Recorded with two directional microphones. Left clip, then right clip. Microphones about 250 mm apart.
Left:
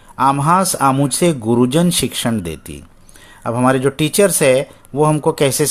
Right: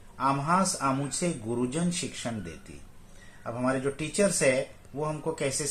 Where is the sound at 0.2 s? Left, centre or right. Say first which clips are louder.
Left 12 dB; left.